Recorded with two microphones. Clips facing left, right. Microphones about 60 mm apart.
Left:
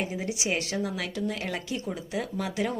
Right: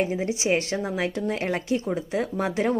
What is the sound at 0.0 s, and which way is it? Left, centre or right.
A woman's voice, right.